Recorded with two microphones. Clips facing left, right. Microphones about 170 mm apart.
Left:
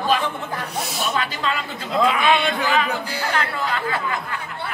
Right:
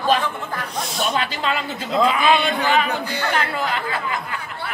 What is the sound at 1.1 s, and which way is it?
Speech, 25° right (ahead or behind).